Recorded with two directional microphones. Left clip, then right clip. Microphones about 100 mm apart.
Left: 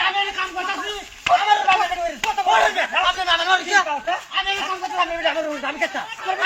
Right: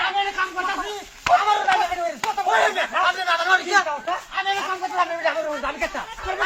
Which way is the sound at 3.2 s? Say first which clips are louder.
Left 1 dB; 20° left (ahead or behind).